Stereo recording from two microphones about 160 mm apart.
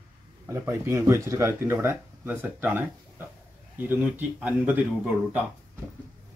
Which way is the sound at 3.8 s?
10° right (ahead or behind).